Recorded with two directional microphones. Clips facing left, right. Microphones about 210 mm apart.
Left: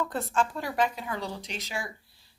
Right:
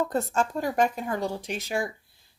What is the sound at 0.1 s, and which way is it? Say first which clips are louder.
A woman's voice: right 3 dB; 40° right (ahead or behind).